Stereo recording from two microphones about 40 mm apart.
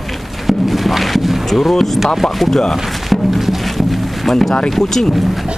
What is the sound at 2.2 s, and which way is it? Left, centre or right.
Speech, centre.